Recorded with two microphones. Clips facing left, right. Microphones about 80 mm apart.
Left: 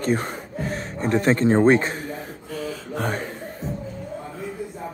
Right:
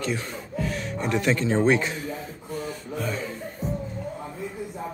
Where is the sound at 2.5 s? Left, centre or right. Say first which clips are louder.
Left 2 dB; left.